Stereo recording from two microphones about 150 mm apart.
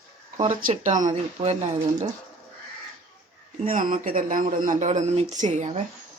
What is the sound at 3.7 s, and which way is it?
Speech, 65° right (ahead or behind).